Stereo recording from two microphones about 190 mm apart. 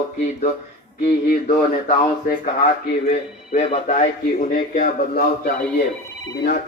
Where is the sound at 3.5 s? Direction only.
35° left (ahead or behind).